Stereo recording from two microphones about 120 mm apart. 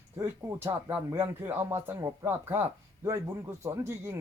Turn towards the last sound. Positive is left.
turn(degrees=-20)  # may be behind; listen again after turning